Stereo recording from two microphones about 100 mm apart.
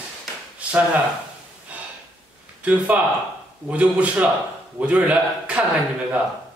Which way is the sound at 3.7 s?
15° right (ahead or behind).